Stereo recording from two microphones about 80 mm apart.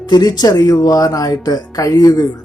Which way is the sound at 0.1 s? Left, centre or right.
Left.